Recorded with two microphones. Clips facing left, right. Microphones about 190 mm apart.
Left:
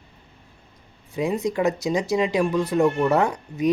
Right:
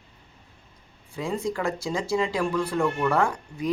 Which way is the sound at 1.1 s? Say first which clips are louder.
Left 5 dB; 20° left (ahead or behind).